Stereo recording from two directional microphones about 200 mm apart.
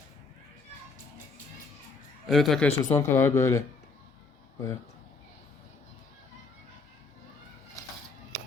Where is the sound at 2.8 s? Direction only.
15° left (ahead or behind).